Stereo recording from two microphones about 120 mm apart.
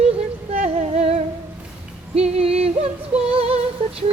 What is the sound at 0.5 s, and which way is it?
Yodeling, 65° right (ahead or behind).